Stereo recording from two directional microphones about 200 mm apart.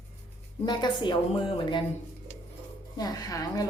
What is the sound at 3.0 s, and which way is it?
Speech, 20° left (ahead or behind).